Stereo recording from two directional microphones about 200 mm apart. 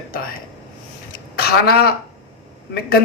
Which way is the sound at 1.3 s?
50° left (ahead or behind).